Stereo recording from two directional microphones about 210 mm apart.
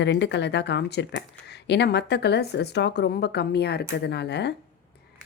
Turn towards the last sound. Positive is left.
turn(degrees=55)  # may be behind; listen again after turning